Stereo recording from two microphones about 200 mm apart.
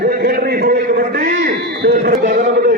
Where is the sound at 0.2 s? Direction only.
50° right (ahead or behind).